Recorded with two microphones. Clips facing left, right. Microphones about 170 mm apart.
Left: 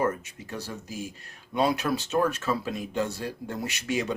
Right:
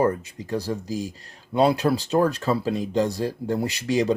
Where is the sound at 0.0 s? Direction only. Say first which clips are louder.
Right 5 dB; 35° right (ahead or behind).